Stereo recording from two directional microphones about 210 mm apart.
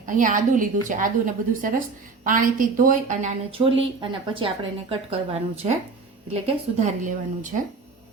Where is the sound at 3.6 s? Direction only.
25° right (ahead or behind).